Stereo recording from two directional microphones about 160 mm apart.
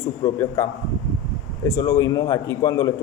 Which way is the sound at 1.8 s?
25° left (ahead or behind).